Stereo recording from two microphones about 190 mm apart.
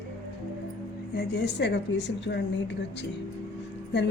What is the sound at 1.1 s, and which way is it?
A woman's voice, 60° left (ahead or behind).